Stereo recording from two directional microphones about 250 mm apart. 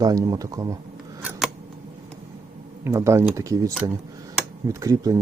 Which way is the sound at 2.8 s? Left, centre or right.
Centre.